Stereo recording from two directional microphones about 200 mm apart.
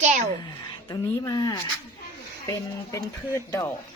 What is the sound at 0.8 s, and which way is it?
Speech, 15° left (ahead or behind).